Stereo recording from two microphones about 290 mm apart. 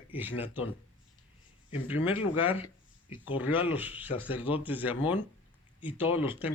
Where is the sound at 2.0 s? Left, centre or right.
Centre.